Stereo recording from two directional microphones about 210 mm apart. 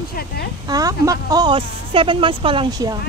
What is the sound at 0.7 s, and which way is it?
Speech, 15° right (ahead or behind).